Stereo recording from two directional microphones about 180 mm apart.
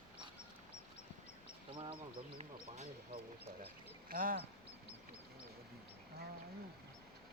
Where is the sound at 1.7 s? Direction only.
30° right (ahead or behind).